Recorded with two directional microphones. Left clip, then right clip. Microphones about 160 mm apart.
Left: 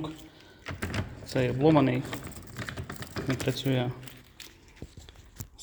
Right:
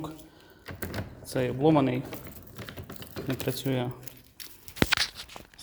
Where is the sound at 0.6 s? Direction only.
25° right (ahead or behind).